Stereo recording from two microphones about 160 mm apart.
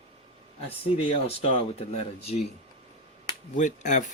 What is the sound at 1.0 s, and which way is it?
Speech, 40° left (ahead or behind).